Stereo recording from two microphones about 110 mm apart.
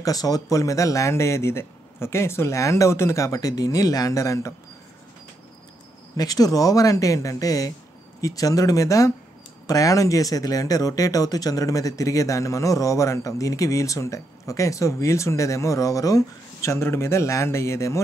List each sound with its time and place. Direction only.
0.0 s speech: 35° left (ahead or behind)
6.1 s speech: 35° left (ahead or behind)